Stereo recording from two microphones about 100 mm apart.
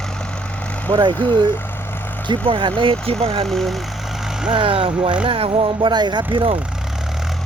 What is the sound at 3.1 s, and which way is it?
Speech, 75° right (ahead or behind).